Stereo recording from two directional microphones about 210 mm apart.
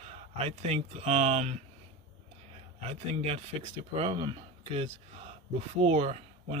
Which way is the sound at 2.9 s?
30° right (ahead or behind).